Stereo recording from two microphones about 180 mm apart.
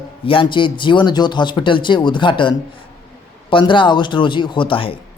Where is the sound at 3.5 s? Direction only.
25° left (ahead or behind).